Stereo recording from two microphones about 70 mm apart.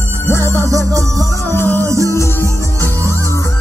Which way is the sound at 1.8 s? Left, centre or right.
Right.